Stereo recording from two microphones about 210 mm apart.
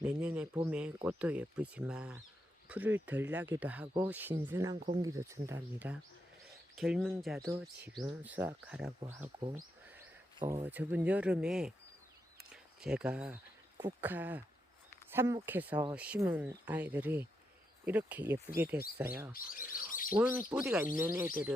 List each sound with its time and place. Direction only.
0.0 s speech: 10° right (ahead or behind)
7.5 s speech: 15° right (ahead or behind)
8.1 s speech: 5° right (ahead or behind)
10.7 s speech: 10° right (ahead or behind)
12.8 s speech: 5° right (ahead or behind)
19.3 s speech: 45° left (ahead or behind)
20.1 s speech: 10° right (ahead or behind)